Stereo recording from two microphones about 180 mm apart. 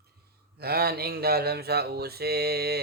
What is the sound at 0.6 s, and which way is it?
Mantra, 60° right (ahead or behind).